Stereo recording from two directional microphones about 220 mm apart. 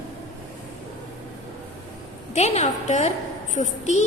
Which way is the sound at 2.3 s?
30° left (ahead or behind).